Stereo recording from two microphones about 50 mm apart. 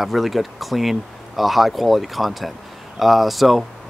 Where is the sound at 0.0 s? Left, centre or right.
Centre.